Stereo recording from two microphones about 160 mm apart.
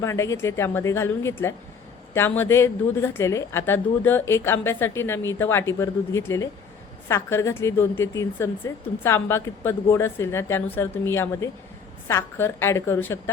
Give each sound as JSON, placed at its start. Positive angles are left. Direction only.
{"t": 0.0, "sound": "a woman's voice", "side_deg": 20}